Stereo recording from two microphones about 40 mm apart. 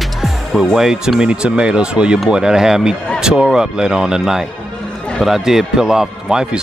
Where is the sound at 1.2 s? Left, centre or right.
Right.